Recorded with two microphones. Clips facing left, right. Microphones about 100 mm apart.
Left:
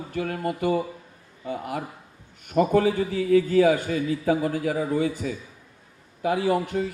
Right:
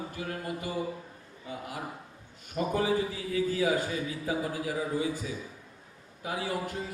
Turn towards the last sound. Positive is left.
turn(degrees=70)  # may be behind; listen again after turning